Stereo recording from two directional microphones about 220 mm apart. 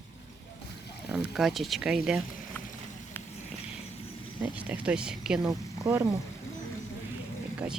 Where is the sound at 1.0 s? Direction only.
Centre (ahead or behind).